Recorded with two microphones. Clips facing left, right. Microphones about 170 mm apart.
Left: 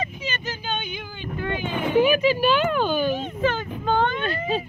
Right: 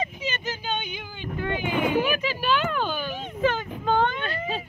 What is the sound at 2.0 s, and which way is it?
Speech, 5° left (ahead or behind).